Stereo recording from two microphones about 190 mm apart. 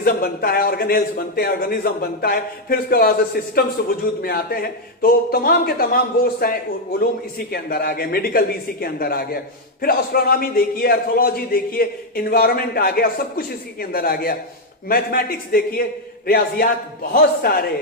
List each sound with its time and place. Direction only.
0.0 s a man's voice: 50° left (ahead or behind)
7.5 s a man's voice: 55° left (ahead or behind)